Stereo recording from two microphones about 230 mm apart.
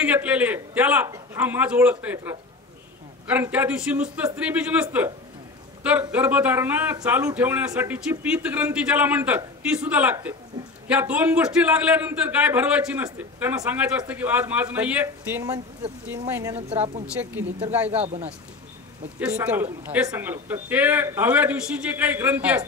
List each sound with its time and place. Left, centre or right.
0.0 s a man's voice: centre
18.0 s speech: right
19.1 s a man's voice: centre